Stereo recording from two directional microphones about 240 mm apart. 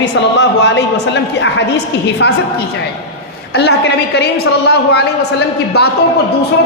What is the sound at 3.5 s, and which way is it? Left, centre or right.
A woman's voice, left.